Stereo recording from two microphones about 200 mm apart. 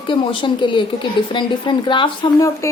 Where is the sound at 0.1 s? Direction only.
25° left (ahead or behind).